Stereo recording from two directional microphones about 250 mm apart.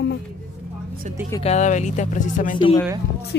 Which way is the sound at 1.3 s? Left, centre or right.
Left.